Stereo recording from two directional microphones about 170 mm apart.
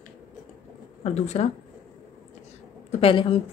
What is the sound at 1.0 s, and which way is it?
Speech, 40° left (ahead or behind).